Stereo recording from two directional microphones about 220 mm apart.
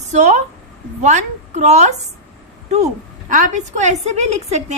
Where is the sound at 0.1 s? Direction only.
30° right (ahead or behind).